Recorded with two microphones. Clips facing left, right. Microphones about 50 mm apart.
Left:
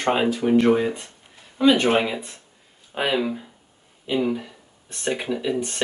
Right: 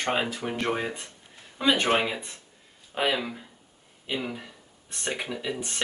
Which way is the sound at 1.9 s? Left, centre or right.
Centre.